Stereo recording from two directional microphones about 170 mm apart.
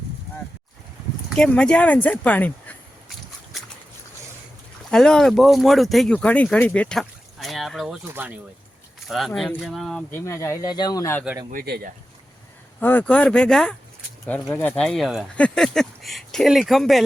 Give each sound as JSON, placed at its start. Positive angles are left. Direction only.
{"t": 1.4, "sound": "speech", "side_deg": 5}
{"t": 4.9, "sound": "speech", "side_deg": 5}
{"t": 8.0, "sound": "speech", "side_deg": -10}
{"t": 9.0, "sound": "speech", "side_deg": 0}
{"t": 10.1, "sound": "speech", "side_deg": 15}
{"t": 11.5, "sound": "speech", "side_deg": -65}
{"t": 12.8, "sound": "speech", "side_deg": 10}